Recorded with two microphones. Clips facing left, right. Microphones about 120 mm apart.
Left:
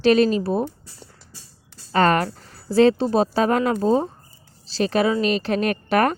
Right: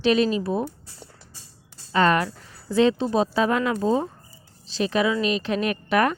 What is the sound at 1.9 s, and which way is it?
Speech, 40° left (ahead or behind).